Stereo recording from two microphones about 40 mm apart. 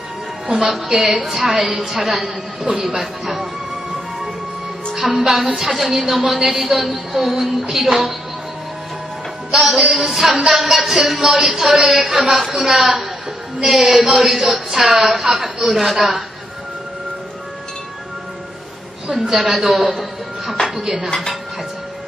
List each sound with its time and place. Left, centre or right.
0.4 s a woman's voice: centre
2.7 s speech: right
3.2 s music: centre
5.0 s a woman's voice: centre
9.5 s a woman's voice: centre
19.3 s a woman's voice: centre
20.8 s speech: centre